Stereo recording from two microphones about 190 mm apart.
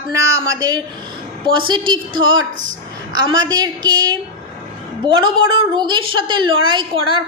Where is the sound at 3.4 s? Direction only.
20° right (ahead or behind).